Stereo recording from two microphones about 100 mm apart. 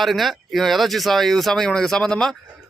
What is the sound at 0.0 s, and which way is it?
Speech, centre (ahead or behind).